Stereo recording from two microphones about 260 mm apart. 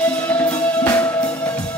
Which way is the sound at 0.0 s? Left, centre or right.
Centre.